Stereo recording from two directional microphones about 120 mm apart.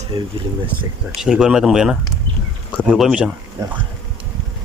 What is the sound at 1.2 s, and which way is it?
Speech, 5° right (ahead or behind).